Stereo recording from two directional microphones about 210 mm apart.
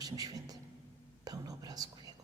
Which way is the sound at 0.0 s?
15° right (ahead or behind).